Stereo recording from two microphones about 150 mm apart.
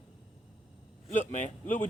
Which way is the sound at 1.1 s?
55° left (ahead or behind).